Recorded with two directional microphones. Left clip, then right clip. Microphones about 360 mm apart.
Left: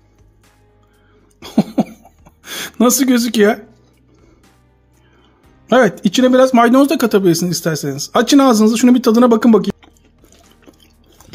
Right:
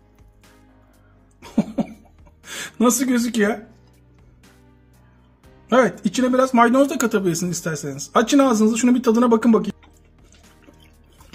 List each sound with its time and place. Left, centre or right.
1.4 s cough: left
5.7 s speech: left